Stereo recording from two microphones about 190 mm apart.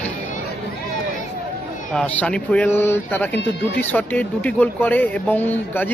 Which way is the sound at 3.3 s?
65° left (ahead or behind).